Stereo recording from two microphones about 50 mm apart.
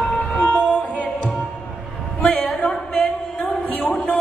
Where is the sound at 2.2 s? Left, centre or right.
Left.